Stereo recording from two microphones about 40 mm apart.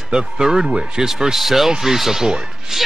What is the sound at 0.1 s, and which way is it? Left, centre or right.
Speech, centre.